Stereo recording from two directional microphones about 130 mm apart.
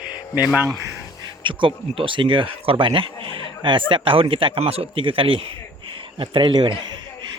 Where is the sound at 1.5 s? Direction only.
40° right (ahead or behind).